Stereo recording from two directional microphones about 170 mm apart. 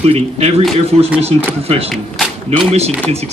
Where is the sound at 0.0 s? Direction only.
35° right (ahead or behind).